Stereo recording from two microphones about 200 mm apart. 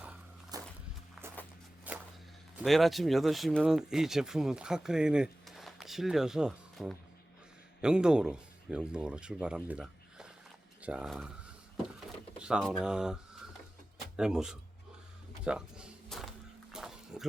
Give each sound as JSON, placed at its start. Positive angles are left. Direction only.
{"t": 0.5, "sound": "walk", "side_deg": -20}
{"t": 1.9, "sound": "a sound", "side_deg": -10}
{"t": 2.6, "sound": "speech", "side_deg": 0}
{"t": 12.4, "sound": "speech", "side_deg": -5}
{"t": 14.2, "sound": "speech", "side_deg": -5}
{"t": 15.4, "sound": "a sound", "side_deg": -5}